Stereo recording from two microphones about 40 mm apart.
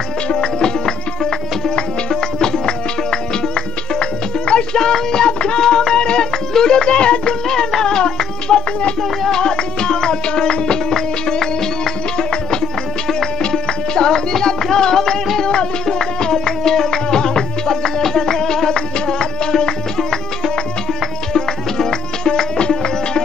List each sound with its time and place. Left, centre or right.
0.3 s music: centre
7.4 s music: centre